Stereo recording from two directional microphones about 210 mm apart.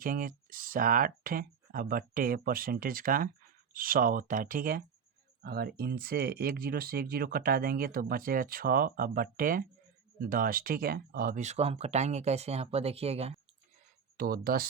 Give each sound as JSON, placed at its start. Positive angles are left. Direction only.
{"t": 0.0, "sound": "speech", "side_deg": -40}
{"t": 14.2, "sound": "speech", "side_deg": -45}